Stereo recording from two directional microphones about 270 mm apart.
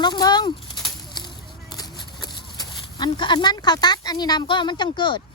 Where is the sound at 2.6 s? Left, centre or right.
Centre.